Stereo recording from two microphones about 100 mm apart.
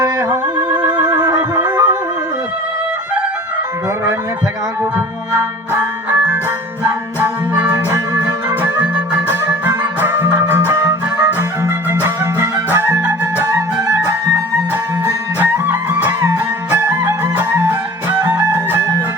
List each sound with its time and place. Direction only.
0.0 s music: 35° right (ahead or behind)
0.4 s music: 20° right (ahead or behind)
5.3 s music: 25° right (ahead or behind)
13.4 s music: 35° right (ahead or behind)
16.2 s music: 35° right (ahead or behind)
17.3 s music: 20° right (ahead or behind)
18.3 s music: 30° right (ahead or behind)